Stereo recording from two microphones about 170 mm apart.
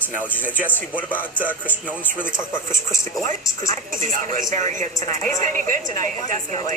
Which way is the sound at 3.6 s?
50° right (ahead or behind).